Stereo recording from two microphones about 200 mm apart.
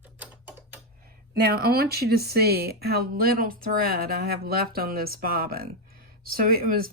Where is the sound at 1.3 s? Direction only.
50° right (ahead or behind).